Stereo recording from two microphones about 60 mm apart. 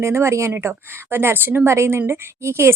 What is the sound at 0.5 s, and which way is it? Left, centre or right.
A woman's voice, right.